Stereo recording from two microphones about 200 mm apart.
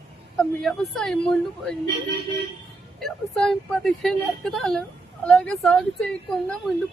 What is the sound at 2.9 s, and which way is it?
Speech, centre (ahead or behind).